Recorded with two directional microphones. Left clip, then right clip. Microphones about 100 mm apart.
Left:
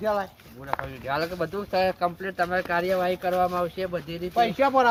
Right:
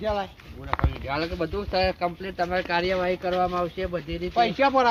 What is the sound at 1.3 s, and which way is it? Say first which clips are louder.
Speech: even; 5° left (ahead or behind).